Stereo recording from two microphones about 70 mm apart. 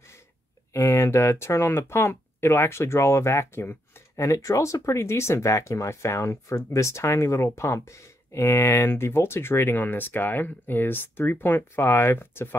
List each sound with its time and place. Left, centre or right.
0.7 s speech: left
4.2 s speech: left